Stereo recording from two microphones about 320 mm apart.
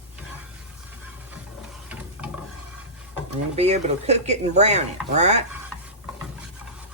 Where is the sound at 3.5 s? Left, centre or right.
Centre.